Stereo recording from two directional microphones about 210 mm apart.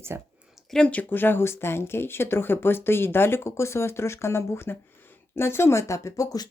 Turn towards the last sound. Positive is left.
turn(degrees=20)  # may be behind; listen again after turning